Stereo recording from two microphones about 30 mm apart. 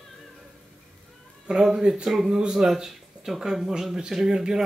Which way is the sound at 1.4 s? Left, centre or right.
Right.